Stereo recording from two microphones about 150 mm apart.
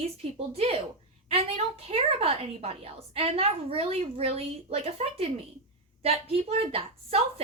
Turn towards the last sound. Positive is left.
turn(degrees=-40)  # may be behind; listen again after turning